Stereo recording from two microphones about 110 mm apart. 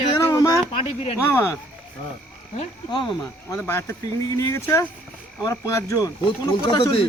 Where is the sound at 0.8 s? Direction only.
60° left (ahead or behind).